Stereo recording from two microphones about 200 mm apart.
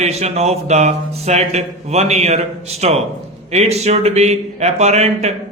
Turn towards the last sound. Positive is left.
turn(degrees=-35)  # may be behind; listen again after turning